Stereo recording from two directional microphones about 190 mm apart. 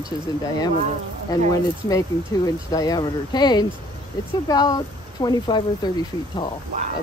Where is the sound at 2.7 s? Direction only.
20° left (ahead or behind).